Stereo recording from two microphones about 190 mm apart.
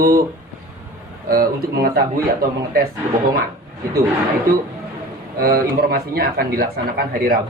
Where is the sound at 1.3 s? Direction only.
50° right (ahead or behind).